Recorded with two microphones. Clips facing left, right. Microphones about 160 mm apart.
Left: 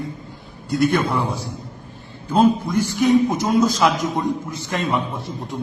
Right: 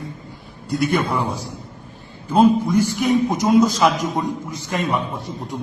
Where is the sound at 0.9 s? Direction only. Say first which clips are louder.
Even; 5° right (ahead or behind).